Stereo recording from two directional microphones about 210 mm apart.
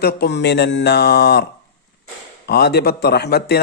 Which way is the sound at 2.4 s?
50° left (ahead or behind).